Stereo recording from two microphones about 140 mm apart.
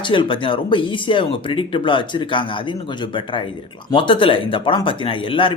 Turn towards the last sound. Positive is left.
turn(degrees=40)  # may be behind; listen again after turning